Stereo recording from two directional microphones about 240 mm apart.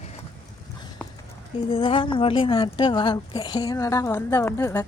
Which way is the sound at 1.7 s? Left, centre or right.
Left.